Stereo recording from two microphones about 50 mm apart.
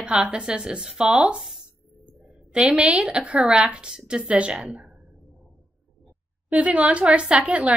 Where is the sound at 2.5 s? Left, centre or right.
Centre.